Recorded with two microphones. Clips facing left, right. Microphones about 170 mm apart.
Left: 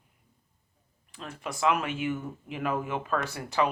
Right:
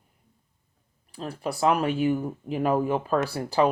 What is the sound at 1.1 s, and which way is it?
Speech, 35° right (ahead or behind).